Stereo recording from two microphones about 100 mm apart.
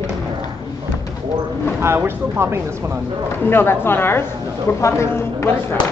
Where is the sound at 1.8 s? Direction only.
25° right (ahead or behind).